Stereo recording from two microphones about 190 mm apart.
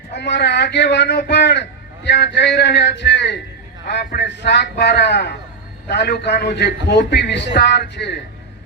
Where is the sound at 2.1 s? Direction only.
60° left (ahead or behind).